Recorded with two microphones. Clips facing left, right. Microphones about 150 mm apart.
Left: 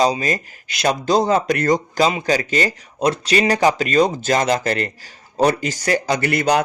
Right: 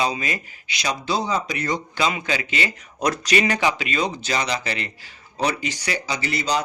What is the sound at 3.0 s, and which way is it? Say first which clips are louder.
A man's voice: left 3 dB; 30° left (ahead or behind).